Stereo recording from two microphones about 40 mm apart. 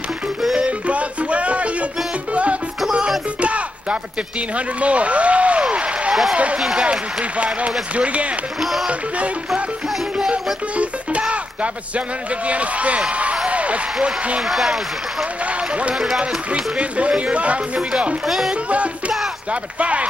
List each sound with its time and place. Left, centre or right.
0.7 s music: right
4.6 s speech: right
6.6 s speech: centre
6.9 s speech: right
8.5 s speech: centre
10.3 s music: right
12.4 s speech: right
13.1 s a sound: right
13.5 s applause: right
14.0 s speech: right
14.4 s speech: centre
16.5 s speech: right
18.2 s speech: centre
18.5 s speech: right